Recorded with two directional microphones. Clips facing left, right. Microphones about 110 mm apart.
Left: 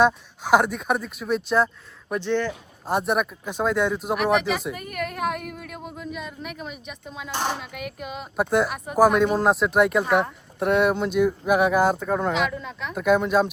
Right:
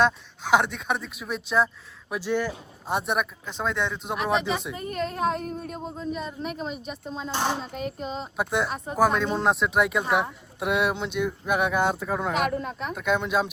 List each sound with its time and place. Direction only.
0.0 s speech: 5° left (ahead or behind)
4.2 s speech: 20° right (ahead or behind)
7.3 s speech: 15° right (ahead or behind)
7.6 s speech: 30° right (ahead or behind)
8.4 s speech: centre (ahead or behind)
9.0 s speech: 10° left (ahead or behind)
9.4 s speech: centre (ahead or behind)
12.3 s speech: 45° right (ahead or behind)
12.9 s speech: centre (ahead or behind)